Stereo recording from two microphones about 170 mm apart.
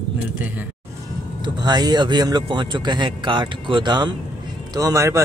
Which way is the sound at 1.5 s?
25° right (ahead or behind).